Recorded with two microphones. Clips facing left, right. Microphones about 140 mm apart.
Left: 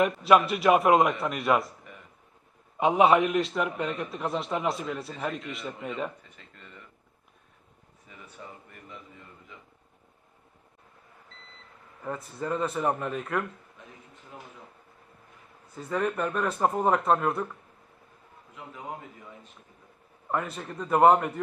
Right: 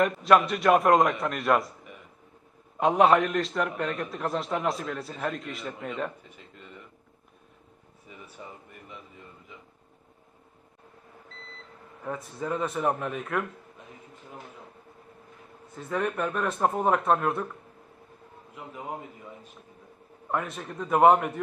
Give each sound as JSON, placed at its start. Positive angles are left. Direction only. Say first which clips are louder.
{"t": 0.0, "sound": "a man's voice", "louder": "even", "side_deg": 5}
{"t": 2.7, "sound": "a man's voice", "louder": "even", "side_deg": 5}
{"t": 6.3, "sound": "a sound", "louder": "right 4 dB", "side_deg": -15}
{"t": 8.1, "sound": "a sound", "louder": "right 3 dB", "side_deg": -15}
{"t": 12.0, "sound": "a man's voice", "louder": "even", "side_deg": 0}
{"t": 15.7, "sound": "a man's voice", "louder": "left 1 dB", "side_deg": 0}
{"t": 20.3, "sound": "a man's voice", "louder": "even", "side_deg": 0}